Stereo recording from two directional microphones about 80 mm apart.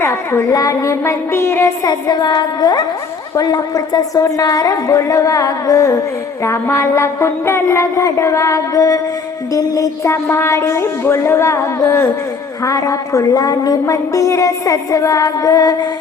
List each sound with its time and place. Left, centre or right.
0.0 s music: left
1.8 s a woman's voice: left
6.4 s music: left
12.6 s a woman's voice: left